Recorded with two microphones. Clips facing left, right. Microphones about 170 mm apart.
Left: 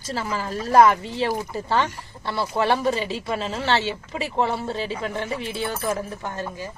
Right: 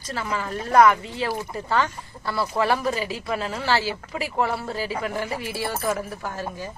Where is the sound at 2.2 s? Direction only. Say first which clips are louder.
Left 1 dB; 25° left (ahead or behind).